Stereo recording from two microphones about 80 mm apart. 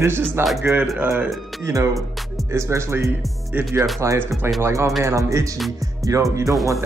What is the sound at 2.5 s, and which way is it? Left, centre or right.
Speech, right.